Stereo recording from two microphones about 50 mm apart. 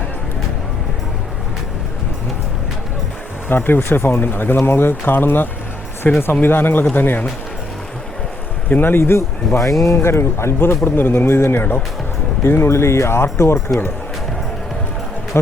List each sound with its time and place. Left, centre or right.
3.5 s speech: left
8.7 s speech: left
9.0 s speech: left
9.8 s speech: left